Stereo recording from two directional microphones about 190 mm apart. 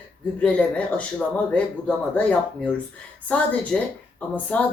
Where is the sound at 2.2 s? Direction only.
5° left (ahead or behind).